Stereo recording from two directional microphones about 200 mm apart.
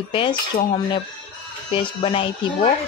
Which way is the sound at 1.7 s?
25° left (ahead or behind).